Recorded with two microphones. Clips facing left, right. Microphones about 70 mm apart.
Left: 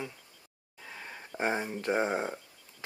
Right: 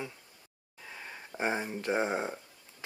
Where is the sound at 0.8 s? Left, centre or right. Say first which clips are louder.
Left 1 dB; centre.